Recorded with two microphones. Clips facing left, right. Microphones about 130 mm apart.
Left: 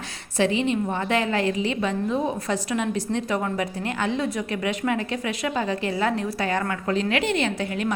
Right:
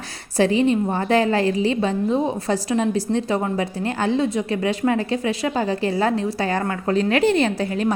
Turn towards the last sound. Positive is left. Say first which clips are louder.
# right 4 dB
turn(degrees=-35)  # may be behind; listen again after turning